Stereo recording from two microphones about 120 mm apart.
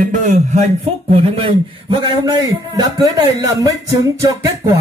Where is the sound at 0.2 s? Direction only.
80° right.